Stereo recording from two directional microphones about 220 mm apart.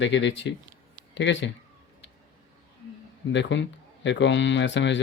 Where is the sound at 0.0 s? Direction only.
55° left (ahead or behind).